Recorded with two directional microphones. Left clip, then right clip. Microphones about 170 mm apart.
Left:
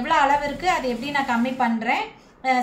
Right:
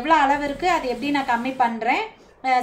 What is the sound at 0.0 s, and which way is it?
A woman's voice, 40° right (ahead or behind).